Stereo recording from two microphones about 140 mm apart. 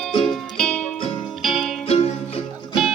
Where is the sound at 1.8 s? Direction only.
45° left (ahead or behind).